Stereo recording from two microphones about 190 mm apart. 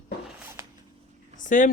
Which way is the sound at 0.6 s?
15° right (ahead or behind).